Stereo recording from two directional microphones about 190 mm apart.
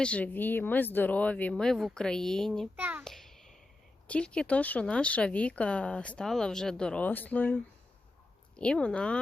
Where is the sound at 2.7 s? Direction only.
10° right (ahead or behind).